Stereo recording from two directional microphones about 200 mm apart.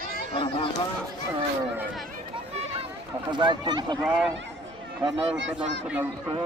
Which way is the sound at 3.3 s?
25° right (ahead or behind).